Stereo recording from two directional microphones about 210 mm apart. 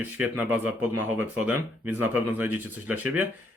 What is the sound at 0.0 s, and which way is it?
Speech, 5° right (ahead or behind).